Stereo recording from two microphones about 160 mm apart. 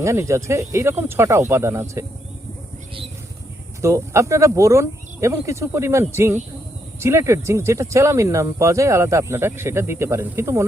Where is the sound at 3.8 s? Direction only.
20° right (ahead or behind).